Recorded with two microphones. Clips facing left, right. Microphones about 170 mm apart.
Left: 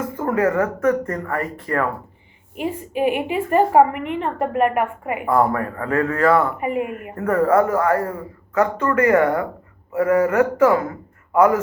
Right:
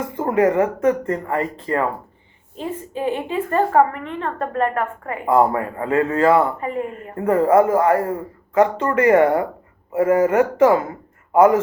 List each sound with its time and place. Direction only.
0.2 s speech: 20° right (ahead or behind)
2.6 s a woman's voice: 15° left (ahead or behind)
5.2 s speech: 25° right (ahead or behind)
6.6 s a woman's voice: 15° left (ahead or behind)
7.2 s speech: 25° right (ahead or behind)